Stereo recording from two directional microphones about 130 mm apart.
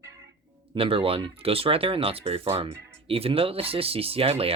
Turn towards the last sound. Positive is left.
turn(degrees=-50)  # may be behind; listen again after turning